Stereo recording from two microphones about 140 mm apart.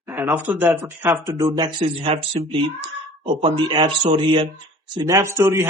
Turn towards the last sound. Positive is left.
turn(degrees=-20)  # may be behind; listen again after turning